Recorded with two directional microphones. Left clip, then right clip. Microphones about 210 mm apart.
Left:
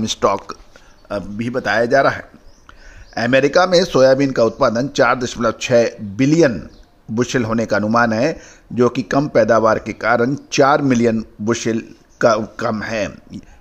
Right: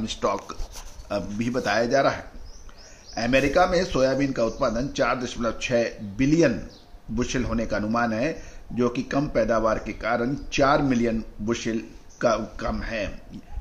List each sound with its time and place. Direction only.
0.0 s speech: 45° left (ahead or behind)
1.0 s a man's voice: 25° left (ahead or behind)
1.9 s speech: 40° left (ahead or behind)